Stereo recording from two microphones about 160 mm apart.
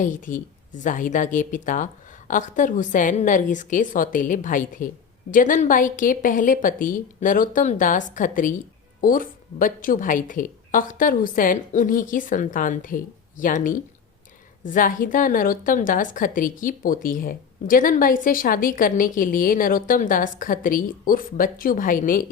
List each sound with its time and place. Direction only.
0.0 s a woman's voice: 55° left (ahead or behind)